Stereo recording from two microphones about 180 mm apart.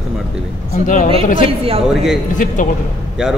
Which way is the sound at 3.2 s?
5° right (ahead or behind).